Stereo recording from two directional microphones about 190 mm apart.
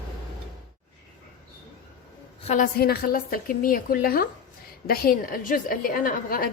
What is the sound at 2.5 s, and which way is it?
A woman's voice, 45° left (ahead or behind).